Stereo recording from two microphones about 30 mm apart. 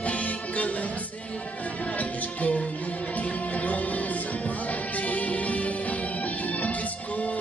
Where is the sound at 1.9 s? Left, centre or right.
Left.